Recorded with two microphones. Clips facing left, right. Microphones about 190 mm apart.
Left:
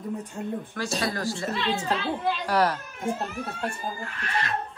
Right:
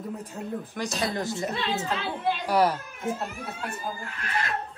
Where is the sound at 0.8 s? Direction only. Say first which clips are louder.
Even; 15° right (ahead or behind).